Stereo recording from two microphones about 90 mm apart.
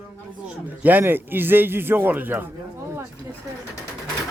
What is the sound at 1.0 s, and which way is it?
A man's voice, 25° right (ahead or behind).